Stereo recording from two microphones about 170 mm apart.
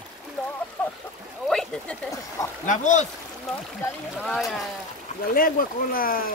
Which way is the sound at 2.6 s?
45° left (ahead or behind).